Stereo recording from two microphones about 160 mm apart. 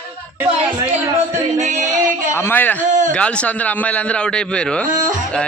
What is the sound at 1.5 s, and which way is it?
Music, 50° right (ahead or behind).